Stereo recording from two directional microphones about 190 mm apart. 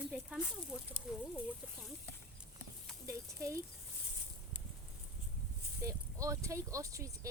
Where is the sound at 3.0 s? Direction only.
15° right (ahead or behind).